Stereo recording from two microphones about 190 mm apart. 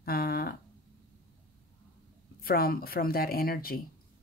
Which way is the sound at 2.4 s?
50° left (ahead or behind).